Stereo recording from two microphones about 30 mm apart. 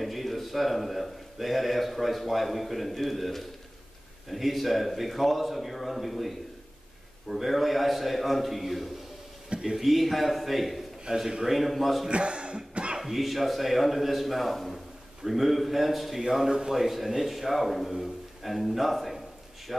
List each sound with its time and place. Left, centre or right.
0.0 s a man's voice: centre
7.3 s a man's voice: centre
11.1 s a man's voice: right
11.4 s a man's voice: centre
12.1 s cough: right
13.0 s a man's voice: centre
16.4 s a man's voice: centre
16.7 s a man's voice: centre